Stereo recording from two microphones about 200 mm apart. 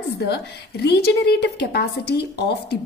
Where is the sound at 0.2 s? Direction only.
55° left (ahead or behind).